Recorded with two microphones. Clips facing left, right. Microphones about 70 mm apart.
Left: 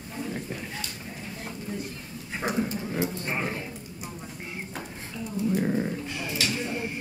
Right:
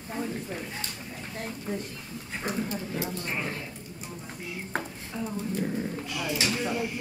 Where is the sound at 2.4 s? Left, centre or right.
Centre.